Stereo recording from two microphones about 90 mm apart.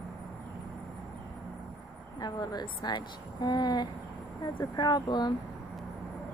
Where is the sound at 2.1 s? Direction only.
45° left (ahead or behind).